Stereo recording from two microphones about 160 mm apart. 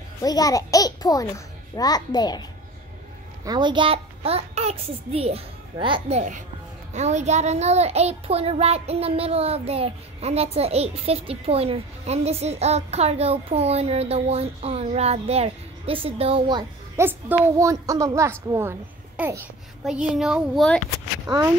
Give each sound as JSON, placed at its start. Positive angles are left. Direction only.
{"t": 0.2, "sound": "a child's voice", "side_deg": 25}
{"t": 3.4, "sound": "child singing", "side_deg": -25}
{"t": 16.9, "sound": "a woman's voice", "side_deg": -15}
{"t": 19.8, "sound": "speech", "side_deg": 0}